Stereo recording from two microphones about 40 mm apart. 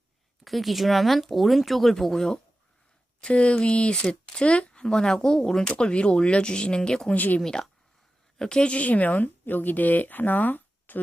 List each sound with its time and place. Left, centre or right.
0.4 s speech: centre
3.2 s speech: left
5.7 s speech: left
7.1 s speech: left
7.4 s speech: centre
8.7 s speech: left